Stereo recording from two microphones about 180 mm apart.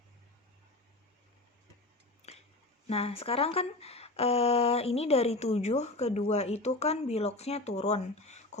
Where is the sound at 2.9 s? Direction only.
35° left (ahead or behind).